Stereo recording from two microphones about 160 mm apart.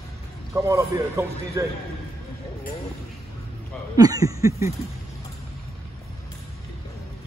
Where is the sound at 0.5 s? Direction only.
20° right (ahead or behind).